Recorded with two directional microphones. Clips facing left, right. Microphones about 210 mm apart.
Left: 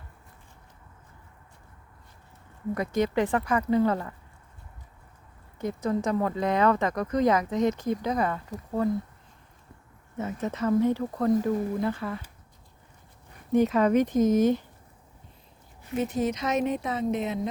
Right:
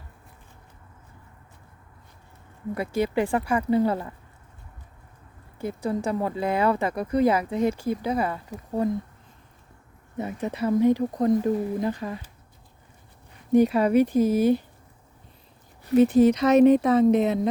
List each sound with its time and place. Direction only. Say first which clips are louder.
2.7 s speech: right 1 dB; 10° right (ahead or behind)
5.5 s speech: even; 10° right (ahead or behind)
10.2 s speech: right 2 dB; 15° right (ahead or behind)
13.5 s speech: right 3 dB; 10° right (ahead or behind)
15.8 s speech: right 10 dB; 35° right (ahead or behind)